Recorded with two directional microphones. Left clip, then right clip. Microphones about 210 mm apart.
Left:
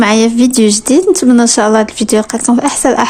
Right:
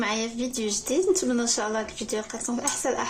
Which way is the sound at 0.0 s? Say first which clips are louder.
Left 18 dB; 50° left (ahead or behind).